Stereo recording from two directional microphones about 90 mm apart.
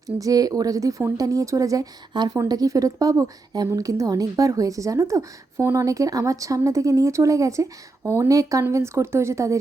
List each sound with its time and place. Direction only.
0.2 s speech: 45° right (ahead or behind)